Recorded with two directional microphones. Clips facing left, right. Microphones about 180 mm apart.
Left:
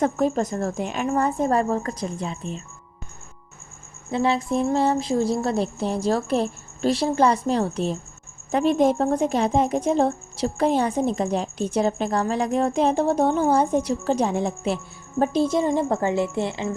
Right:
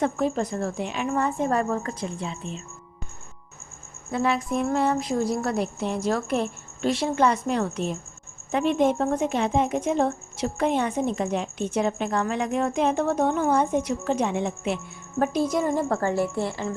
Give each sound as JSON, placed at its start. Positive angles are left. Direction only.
{"t": 0.0, "sound": "a woman's voice", "side_deg": 45}
{"t": 4.1, "sound": "a woman's voice", "side_deg": 30}